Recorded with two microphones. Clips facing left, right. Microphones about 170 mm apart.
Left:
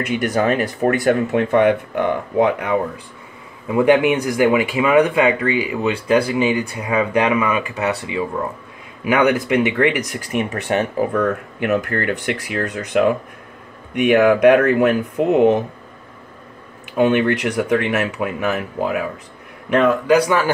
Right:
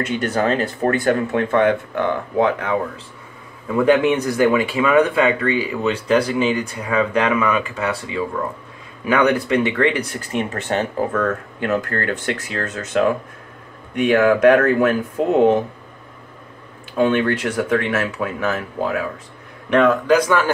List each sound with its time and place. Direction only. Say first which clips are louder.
0.0 s speech: left 1 dB; 15° left (ahead or behind)
16.9 s speech: left 2 dB; 15° left (ahead or behind)